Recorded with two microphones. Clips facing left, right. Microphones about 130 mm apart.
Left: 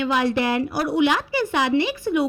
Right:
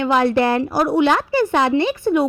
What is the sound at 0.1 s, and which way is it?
A woman's voice, 45° right (ahead or behind).